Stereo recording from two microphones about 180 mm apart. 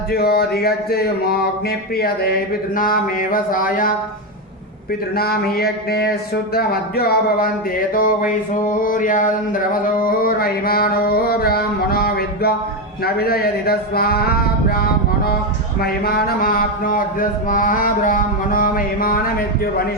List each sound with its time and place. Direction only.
0.1 s speech: 60° left (ahead or behind)
2.0 s mantra: 60° left (ahead or behind)
5.1 s speech: 60° left (ahead or behind)
15.8 s mantra: 60° left (ahead or behind)